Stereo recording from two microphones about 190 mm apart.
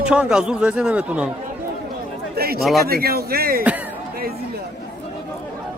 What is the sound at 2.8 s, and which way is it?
Speech, 55° right (ahead or behind).